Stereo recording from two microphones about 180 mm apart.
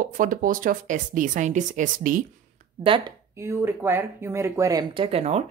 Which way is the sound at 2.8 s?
30° right (ahead or behind).